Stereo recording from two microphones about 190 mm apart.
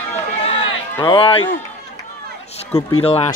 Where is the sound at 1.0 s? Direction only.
25° left (ahead or behind).